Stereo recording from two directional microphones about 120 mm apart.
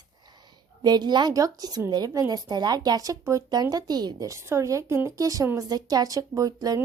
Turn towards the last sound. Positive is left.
turn(degrees=-30)  # may be behind; listen again after turning